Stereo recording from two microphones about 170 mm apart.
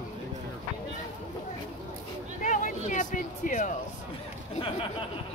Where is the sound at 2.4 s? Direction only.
50° left (ahead or behind).